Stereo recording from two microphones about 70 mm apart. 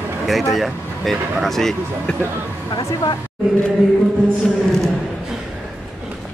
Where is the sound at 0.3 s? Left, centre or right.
Centre.